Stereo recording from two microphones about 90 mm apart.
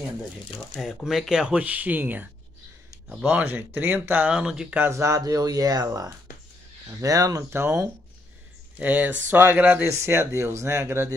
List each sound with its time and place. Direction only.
0.7 s speech: 5° left (ahead or behind); by 4.3 s 20° right (ahead or behind)
4.3 s speech: 10° right (ahead or behind)
4.7 s speech: 25° right (ahead or behind)
8.7 s speech: 15° right (ahead or behind)
9.8 s speech: 30° right (ahead or behind)